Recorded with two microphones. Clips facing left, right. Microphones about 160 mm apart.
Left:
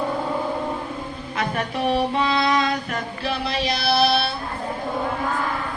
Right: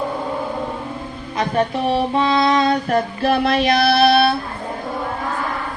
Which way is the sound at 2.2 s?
30° right (ahead or behind).